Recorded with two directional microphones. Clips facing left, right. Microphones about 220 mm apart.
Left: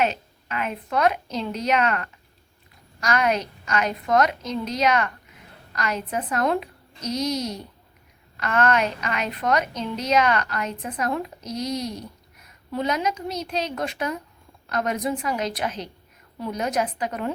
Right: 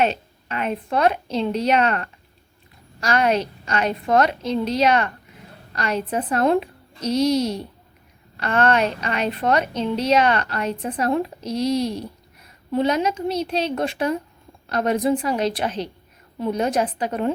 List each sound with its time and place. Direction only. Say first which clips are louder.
0.0 s a woman's voice: right 3 dB; 30° right (ahead or behind)